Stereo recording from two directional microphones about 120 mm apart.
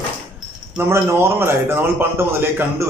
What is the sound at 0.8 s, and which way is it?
A man's voice, 20° right (ahead or behind).